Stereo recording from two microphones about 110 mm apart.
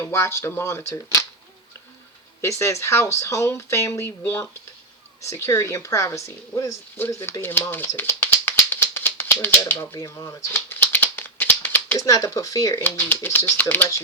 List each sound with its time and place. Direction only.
0.0 s speech: 25° left (ahead or behind)
2.4 s speech: 25° left (ahead or behind)
7.9 s a sound: 25° left (ahead or behind)
8.7 s rattle: 20° left (ahead or behind)
9.6 s speech: 20° left (ahead or behind)
10.5 s a sound: 20° left (ahead or behind)
11.9 s speech: 30° left (ahead or behind)